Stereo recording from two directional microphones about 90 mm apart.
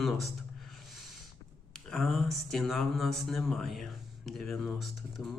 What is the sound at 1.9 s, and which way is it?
Speech, centre (ahead or behind).